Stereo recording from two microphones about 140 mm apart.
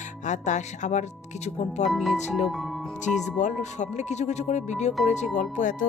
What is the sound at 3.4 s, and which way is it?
Speech, 55° left (ahead or behind).